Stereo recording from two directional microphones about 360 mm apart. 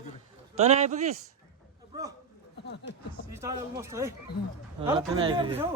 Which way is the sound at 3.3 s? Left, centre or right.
Centre.